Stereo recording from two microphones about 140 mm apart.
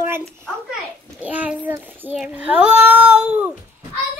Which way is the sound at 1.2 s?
10° right (ahead or behind).